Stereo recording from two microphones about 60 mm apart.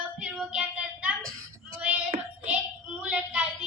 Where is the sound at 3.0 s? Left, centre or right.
Right.